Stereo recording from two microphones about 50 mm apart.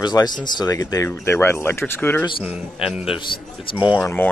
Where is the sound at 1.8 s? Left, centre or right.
Left.